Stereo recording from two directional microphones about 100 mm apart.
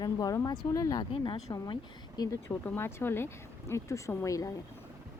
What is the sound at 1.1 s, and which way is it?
Speech, 50° left (ahead or behind).